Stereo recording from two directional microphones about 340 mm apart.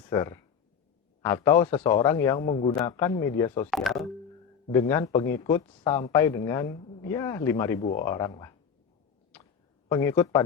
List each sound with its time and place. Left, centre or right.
0.1 s speech: centre
9.9 s speech: centre